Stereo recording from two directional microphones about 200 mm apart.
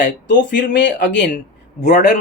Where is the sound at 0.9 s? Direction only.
40° left (ahead or behind).